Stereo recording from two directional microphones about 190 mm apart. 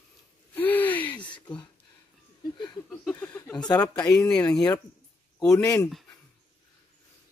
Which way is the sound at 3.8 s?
20° left (ahead or behind).